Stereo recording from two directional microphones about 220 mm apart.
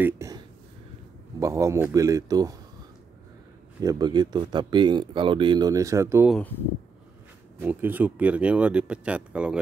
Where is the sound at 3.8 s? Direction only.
15° right (ahead or behind).